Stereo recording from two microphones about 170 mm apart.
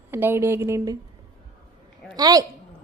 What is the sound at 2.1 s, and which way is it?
Speech, 20° right (ahead or behind).